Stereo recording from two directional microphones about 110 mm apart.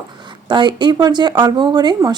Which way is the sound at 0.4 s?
45° right (ahead or behind).